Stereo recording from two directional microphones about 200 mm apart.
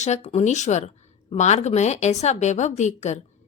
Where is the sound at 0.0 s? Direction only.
35° left (ahead or behind).